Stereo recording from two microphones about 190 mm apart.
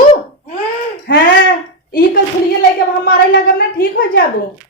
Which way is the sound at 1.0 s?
50° left (ahead or behind).